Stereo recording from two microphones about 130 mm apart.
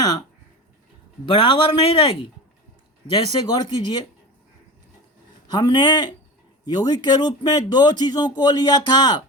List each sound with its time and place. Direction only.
0.0 s speech: 30° left (ahead or behind)
3.6 s speech: 35° left (ahead or behind)
5.5 s speech: 30° left (ahead or behind)